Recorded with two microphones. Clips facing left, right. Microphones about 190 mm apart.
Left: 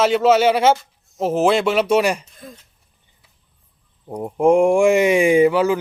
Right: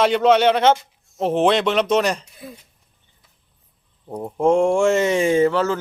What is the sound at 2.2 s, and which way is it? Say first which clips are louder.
Speech: right 1 dB; 10° right (ahead or behind).